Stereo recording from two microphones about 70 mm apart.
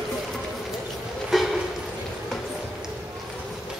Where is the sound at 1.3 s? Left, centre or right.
Centre.